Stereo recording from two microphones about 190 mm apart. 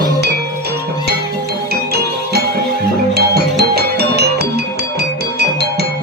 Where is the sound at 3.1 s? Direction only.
55° right (ahead or behind).